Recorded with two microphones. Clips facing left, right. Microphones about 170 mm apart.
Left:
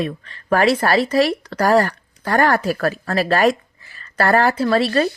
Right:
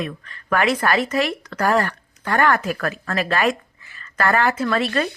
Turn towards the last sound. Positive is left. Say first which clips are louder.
# left 4 dB
turn(degrees=35)  # may be behind; listen again after turning